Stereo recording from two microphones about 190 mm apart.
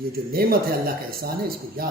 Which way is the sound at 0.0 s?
50° right (ahead or behind).